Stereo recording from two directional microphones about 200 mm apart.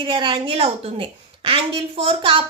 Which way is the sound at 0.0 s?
25° right (ahead or behind).